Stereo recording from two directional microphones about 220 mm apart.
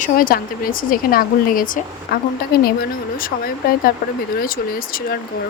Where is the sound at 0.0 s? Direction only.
40° left (ahead or behind).